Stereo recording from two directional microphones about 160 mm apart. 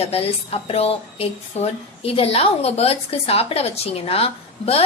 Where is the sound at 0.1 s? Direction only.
40° left (ahead or behind).